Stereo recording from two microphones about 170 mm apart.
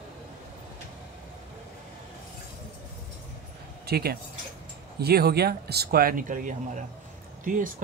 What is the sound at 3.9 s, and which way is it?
Speech, 65° right (ahead or behind).